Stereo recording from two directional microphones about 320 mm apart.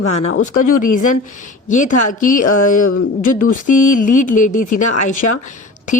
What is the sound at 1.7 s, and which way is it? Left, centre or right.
Speech, left.